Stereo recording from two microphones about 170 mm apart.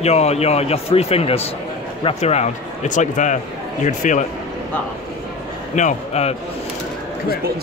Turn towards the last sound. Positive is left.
turn(degrees=40)  # may be behind; listen again after turning